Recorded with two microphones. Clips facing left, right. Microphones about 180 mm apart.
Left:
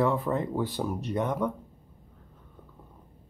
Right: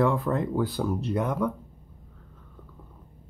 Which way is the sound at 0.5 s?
25° left (ahead or behind).